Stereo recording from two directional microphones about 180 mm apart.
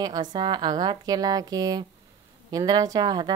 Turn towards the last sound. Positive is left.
turn(degrees=-20)  # may be behind; listen again after turning